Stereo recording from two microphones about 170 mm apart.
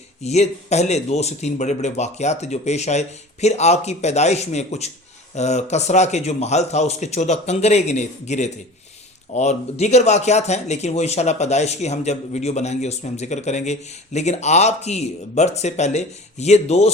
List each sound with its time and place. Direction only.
0.2 s speech: 40° left (ahead or behind)